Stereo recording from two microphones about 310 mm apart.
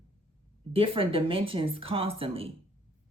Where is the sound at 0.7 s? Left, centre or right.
Centre.